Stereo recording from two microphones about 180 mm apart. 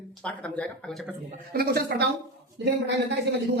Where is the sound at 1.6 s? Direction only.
65° right (ahead or behind).